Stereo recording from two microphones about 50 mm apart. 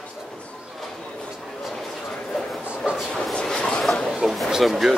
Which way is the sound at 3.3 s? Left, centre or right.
Centre.